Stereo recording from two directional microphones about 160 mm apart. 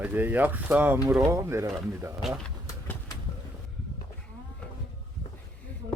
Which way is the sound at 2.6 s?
15° left (ahead or behind).